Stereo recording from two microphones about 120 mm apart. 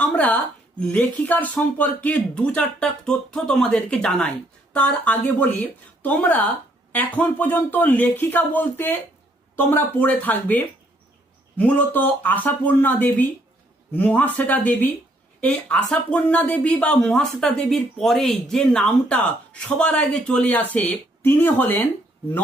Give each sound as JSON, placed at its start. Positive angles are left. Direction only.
{"t": 0.0, "sound": "speech", "side_deg": 10}